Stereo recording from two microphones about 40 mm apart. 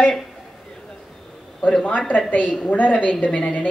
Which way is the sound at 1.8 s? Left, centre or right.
Left.